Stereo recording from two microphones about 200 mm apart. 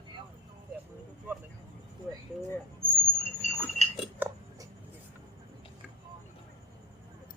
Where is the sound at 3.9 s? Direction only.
10° right (ahead or behind).